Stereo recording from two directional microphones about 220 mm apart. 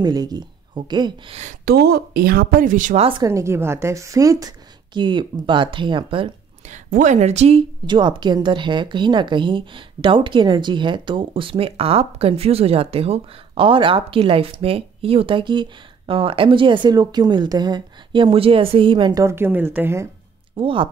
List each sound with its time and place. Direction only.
0.0 s a woman's voice: 15° right (ahead or behind)
1.7 s speech: 45° right (ahead or behind)
3.1 s a woman's voice: 15° right (ahead or behind)
20.5 s a woman's voice: 25° right (ahead or behind)